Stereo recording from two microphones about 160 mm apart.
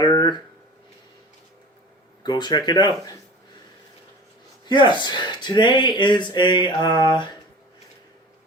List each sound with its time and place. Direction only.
0.0 s a sound: 30° left (ahead or behind)
2.2 s speech: 25° left (ahead or behind)
4.6 s speech: 30° left (ahead or behind)